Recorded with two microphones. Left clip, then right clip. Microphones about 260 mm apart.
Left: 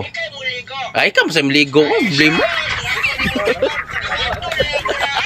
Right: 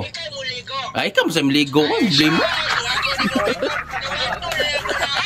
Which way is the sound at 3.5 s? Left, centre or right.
Centre.